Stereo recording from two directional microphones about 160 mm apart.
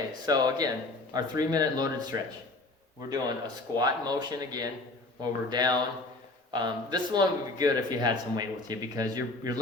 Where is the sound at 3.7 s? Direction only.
25° right (ahead or behind).